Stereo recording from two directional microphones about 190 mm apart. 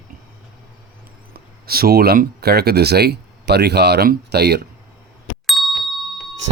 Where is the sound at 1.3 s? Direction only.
50° right (ahead or behind).